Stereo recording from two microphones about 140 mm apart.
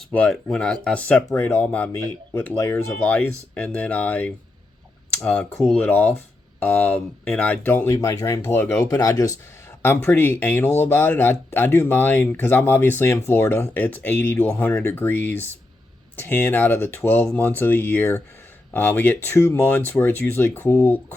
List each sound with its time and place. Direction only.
0.1 s speech: 5° left (ahead or behind)
7.9 s speech: 25° left (ahead or behind)